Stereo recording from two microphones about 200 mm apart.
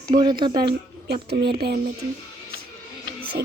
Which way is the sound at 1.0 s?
55° right (ahead or behind).